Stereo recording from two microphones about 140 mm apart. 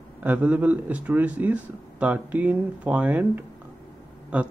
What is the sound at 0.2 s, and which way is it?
Speech, 10° right (ahead or behind).